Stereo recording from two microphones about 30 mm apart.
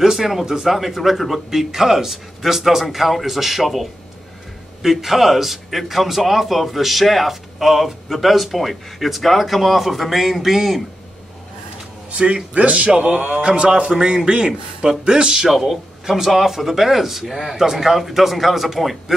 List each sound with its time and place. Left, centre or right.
0.0 s a man's voice: centre
12.1 s a man's voice: right
15.4 s a man's voice: centre